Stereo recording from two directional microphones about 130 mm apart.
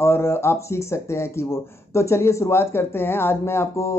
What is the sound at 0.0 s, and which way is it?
Speech, 20° left (ahead or behind).